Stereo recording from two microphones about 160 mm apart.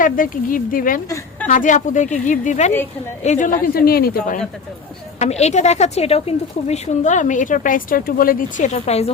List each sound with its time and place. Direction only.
0.0 s a woman's voice: 60° left (ahead or behind)
5.2 s a woman's voice: 45° left (ahead or behind)